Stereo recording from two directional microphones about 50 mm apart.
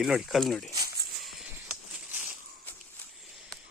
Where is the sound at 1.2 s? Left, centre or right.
Centre.